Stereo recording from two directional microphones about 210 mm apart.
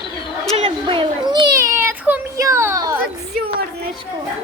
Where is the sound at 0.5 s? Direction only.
25° right (ahead or behind).